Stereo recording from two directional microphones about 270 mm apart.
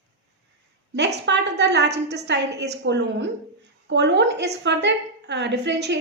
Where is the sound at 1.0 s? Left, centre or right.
Right.